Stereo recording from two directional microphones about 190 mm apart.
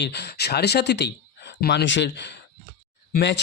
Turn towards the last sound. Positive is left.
turn(degrees=60)  # may be behind; listen again after turning